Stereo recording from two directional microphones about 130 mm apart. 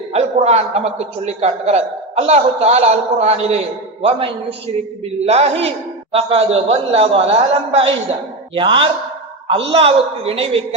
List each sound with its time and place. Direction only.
0.1 s a man's voice: 55° right (ahead or behind)
5.2 s a man's voice: 50° right (ahead or behind)